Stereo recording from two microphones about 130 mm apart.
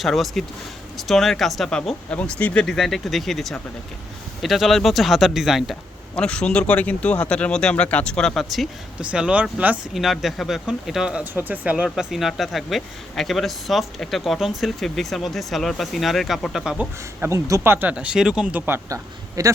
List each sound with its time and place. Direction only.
0.0 s speech: centre (ahead or behind)
9.9 s speech: centre (ahead or behind)
17.2 s speech: 20° right (ahead or behind); by 18.6 s 5° right (ahead or behind)
18.6 s speech: 15° right (ahead or behind)
19.4 s speech: 30° right (ahead or behind)